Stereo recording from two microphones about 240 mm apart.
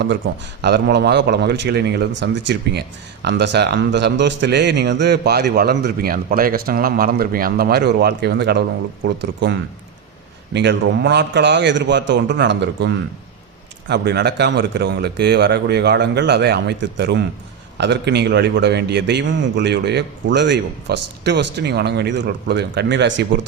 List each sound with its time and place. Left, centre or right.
0.6 s a man's voice: right